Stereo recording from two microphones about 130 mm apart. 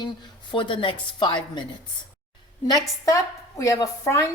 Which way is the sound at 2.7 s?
30° left (ahead or behind).